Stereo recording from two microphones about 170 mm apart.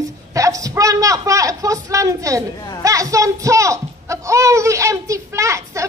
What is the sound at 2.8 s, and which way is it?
Speech, 20° right (ahead or behind).